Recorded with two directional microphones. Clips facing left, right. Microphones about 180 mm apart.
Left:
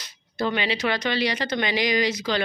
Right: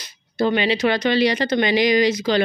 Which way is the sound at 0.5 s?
20° right (ahead or behind).